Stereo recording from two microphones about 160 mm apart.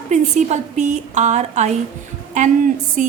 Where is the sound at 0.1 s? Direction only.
45° right (ahead or behind).